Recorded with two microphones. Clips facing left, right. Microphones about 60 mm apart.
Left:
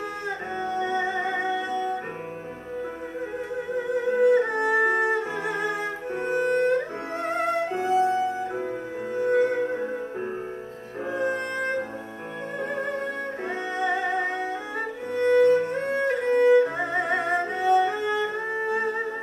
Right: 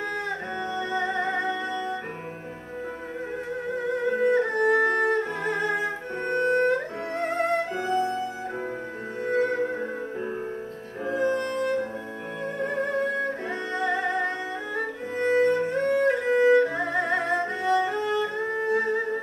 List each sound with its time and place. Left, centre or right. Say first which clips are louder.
0.6 s music: left 3 dB; centre
3.7 s music: left 2 dB; centre
6.5 s music: even; right
7.2 s music: even; centre
11.1 s music: right 2 dB; centre
15.8 s violin: right 2 dB; centre
16.7 s music: even; centre